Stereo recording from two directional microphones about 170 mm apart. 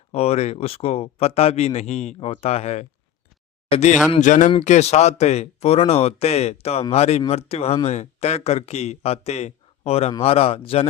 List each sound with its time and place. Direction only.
0.1 s speech: 35° left (ahead or behind)